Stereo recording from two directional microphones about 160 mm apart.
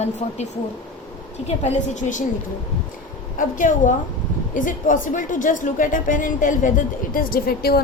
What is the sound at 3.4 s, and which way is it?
A woman's voice, 55° left (ahead or behind).